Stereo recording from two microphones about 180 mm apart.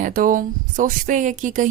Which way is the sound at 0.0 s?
50° right (ahead or behind).